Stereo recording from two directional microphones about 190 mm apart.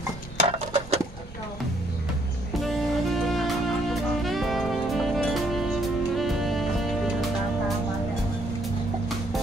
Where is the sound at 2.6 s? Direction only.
Centre (ahead or behind).